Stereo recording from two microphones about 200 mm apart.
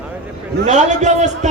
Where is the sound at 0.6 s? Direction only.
35° right (ahead or behind).